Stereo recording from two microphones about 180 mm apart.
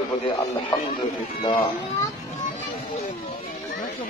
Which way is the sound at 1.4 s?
30° left (ahead or behind).